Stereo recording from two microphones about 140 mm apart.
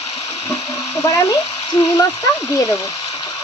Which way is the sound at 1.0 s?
20° left (ahead or behind).